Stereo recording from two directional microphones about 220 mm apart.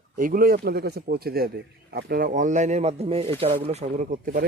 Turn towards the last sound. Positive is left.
turn(degrees=-40)  # may be behind; listen again after turning